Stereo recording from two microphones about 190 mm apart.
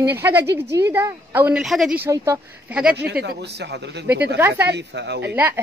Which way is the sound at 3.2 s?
60° right (ahead or behind).